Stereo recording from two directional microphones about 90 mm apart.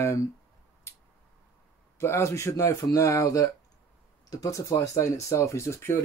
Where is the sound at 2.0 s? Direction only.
30° left (ahead or behind).